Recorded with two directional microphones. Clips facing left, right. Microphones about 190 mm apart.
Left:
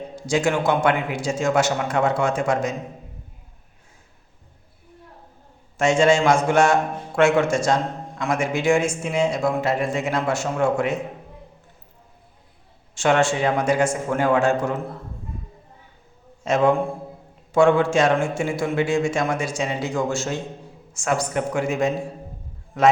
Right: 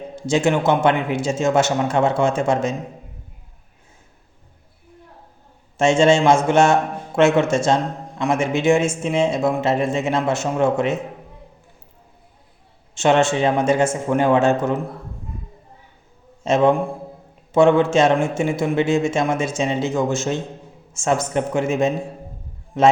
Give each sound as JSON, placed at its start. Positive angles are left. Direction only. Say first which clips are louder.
{"t": 0.2, "sound": "a man's voice", "louder": "right 3 dB", "side_deg": -25}
{"t": 5.7, "sound": "a man's voice", "louder": "right 2 dB", "side_deg": -25}
{"t": 12.9, "sound": "a man's voice", "louder": "right 3 dB", "side_deg": -25}
{"t": 16.4, "sound": "a man's voice", "louder": "right 2 dB", "side_deg": -25}